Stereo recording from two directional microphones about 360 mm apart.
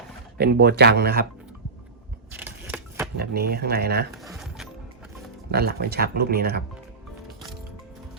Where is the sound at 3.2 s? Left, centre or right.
Right.